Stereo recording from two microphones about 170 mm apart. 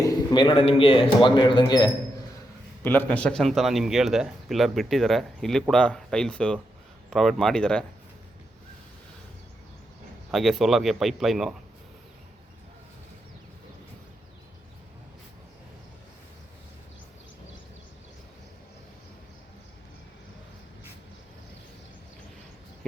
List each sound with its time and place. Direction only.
0.0 s speech: 20° left (ahead or behind)
2.8 s speech: 10° left (ahead or behind)
10.3 s speech: centre (ahead or behind)